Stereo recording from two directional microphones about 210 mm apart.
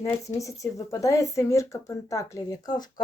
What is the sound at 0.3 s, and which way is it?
Speech, 15° left (ahead or behind).